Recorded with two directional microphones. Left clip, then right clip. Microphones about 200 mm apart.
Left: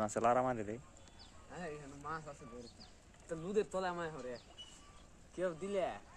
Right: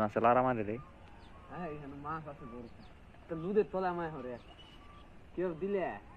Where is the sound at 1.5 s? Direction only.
25° left (ahead or behind).